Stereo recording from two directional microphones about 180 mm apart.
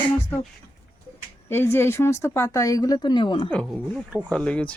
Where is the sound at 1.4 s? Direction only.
15° left (ahead or behind); by 3.5 s 30° left (ahead or behind).